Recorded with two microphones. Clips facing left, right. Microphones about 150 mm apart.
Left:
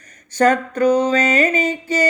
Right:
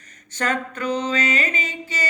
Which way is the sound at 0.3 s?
40° left (ahead or behind).